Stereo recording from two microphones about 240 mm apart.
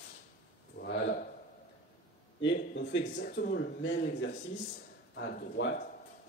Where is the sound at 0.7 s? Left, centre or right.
Left.